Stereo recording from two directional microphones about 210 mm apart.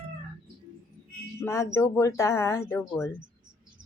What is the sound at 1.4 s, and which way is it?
Speech, 15° left (ahead or behind).